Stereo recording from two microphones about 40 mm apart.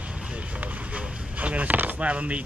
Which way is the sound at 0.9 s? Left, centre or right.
Right.